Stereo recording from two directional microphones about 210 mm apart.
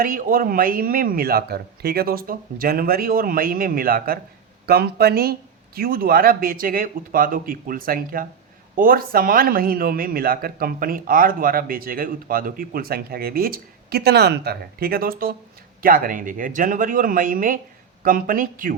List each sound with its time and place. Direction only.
0.0 s speech: 45° right (ahead or behind)